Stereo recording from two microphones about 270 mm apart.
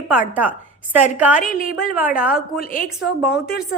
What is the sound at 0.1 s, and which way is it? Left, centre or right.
A woman's voice, centre.